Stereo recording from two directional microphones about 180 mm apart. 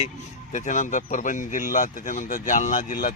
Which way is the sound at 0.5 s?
45° left (ahead or behind).